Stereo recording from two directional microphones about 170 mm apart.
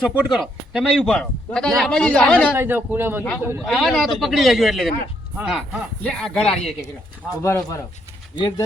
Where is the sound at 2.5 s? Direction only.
10° right (ahead or behind).